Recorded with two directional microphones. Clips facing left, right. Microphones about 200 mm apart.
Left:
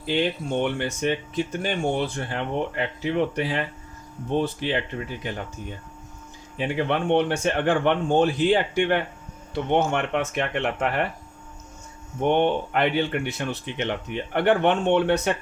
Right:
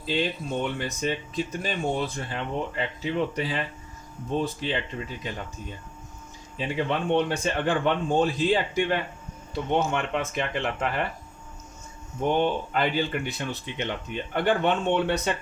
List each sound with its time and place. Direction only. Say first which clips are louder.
0.1 s speech: left 3 dB; 70° left (ahead or behind)
6.6 s speech: left 3 dB; 65° left (ahead or behind)
12.2 s speech: left 3 dB; 65° left (ahead or behind)